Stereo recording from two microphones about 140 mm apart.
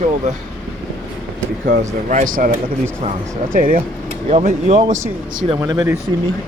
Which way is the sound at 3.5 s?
85° right.